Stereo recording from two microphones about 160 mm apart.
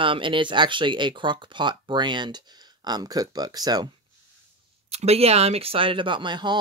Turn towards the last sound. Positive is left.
turn(degrees=-30)  # may be behind; listen again after turning